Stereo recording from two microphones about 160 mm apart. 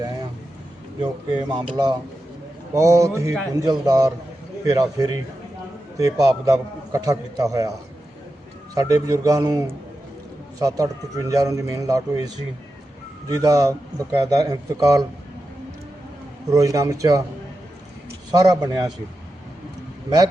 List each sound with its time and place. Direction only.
1.3 s a man's voice: 25° right (ahead or behind)
8.7 s a man's voice: 20° right (ahead or behind)
16.5 s a man's voice: 20° right (ahead or behind)
18.3 s a man's voice: 25° right (ahead or behind)